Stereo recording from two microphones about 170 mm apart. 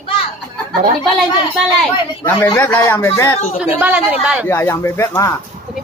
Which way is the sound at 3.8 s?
10° right (ahead or behind).